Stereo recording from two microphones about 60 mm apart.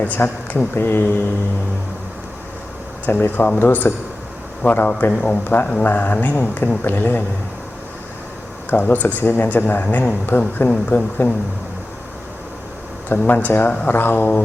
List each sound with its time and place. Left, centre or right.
0.2 s speech: left
3.1 s speech: left
5.1 s speech: centre
5.8 s speech: left
8.7 s speech: left
13.1 s speech: left